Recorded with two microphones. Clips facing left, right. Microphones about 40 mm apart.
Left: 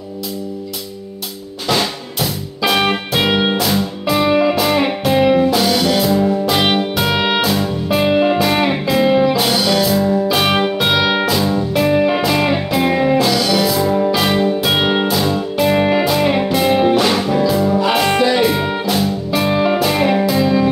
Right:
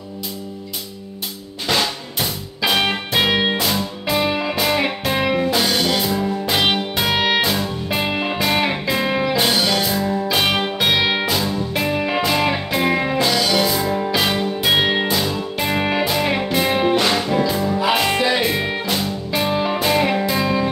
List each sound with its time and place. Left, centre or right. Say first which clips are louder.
2.7 s music: left 3 dB; centre
3.3 s music: left 3 dB; centre
10.8 s music: left 3 dB; centre